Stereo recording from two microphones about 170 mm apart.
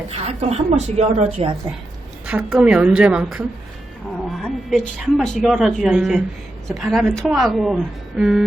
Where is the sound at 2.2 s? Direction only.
5° right (ahead or behind).